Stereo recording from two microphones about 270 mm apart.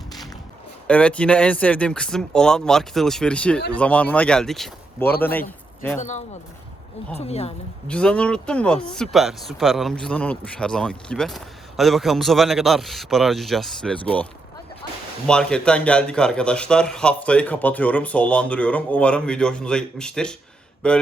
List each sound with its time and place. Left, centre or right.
0.9 s a man's voice: centre
6.0 s a woman's voice: left
7.9 s speech: centre
15.3 s speech: centre